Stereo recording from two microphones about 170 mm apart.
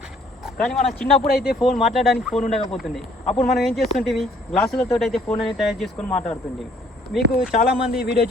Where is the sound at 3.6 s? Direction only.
Centre (ahead or behind).